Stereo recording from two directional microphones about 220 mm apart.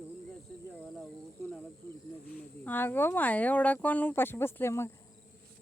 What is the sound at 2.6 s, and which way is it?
Speech, 10° left (ahead or behind).